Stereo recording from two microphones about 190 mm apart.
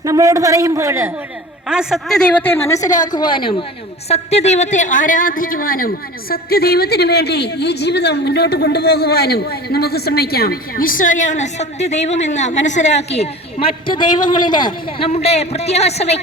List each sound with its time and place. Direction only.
0.0 s a man's voice: 15° right (ahead or behind)
1.6 s a woman's voice: 5° right (ahead or behind); by 16.2 s 35° left (ahead or behind)